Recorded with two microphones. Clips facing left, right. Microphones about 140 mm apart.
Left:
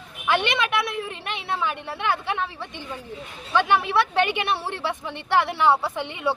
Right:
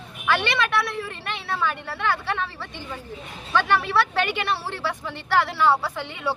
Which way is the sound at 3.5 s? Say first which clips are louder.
Left 1 dB; 15° left (ahead or behind).